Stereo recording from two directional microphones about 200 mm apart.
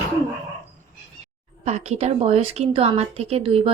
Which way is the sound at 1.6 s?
30° right (ahead or behind).